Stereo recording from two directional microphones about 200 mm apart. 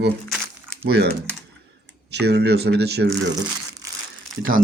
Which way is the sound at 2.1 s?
55° right (ahead or behind).